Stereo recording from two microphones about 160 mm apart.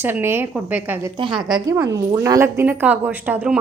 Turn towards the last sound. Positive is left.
turn(degrees=-10)  # may be behind; listen again after turning